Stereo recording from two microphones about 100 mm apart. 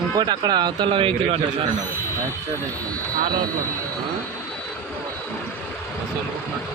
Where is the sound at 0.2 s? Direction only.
45° right (ahead or behind); by 1.4 s 60° right (ahead or behind).